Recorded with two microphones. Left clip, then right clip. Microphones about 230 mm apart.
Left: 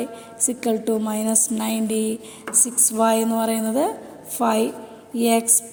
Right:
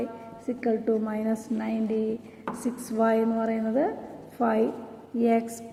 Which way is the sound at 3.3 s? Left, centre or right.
Left.